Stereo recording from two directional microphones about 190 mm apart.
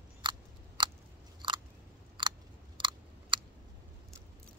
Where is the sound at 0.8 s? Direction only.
25° right (ahead or behind).